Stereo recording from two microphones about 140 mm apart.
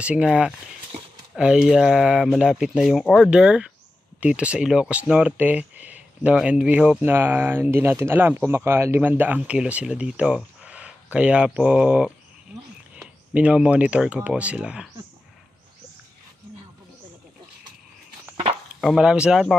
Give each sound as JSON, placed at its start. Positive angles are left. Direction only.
{"t": 0.0, "sound": "speech", "side_deg": -10}
{"t": 18.3, "sound": "a sound", "side_deg": -40}
{"t": 18.8, "sound": "speech", "side_deg": -5}